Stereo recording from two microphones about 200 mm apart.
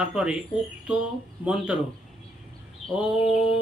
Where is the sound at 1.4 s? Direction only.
5° right (ahead or behind).